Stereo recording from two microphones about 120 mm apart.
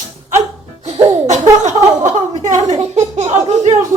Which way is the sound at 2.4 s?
80° right.